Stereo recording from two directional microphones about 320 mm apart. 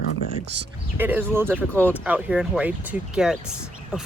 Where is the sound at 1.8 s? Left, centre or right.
Centre.